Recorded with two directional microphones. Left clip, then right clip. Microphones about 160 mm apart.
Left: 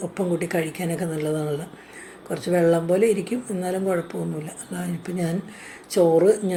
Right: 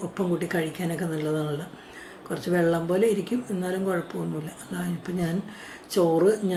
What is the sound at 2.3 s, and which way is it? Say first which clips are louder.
Speech: left 4 dB; 15° left (ahead or behind).